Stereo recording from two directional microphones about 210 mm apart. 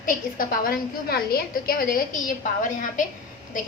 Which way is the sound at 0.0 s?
45° left (ahead or behind).